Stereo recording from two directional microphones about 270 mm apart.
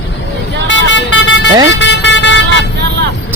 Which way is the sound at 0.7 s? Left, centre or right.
Left.